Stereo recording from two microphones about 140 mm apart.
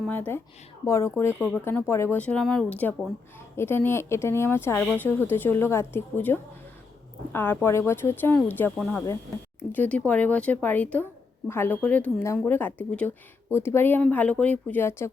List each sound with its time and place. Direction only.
0.1 s speech: 15° left (ahead or behind)
8.8 s speech: 5° left (ahead or behind)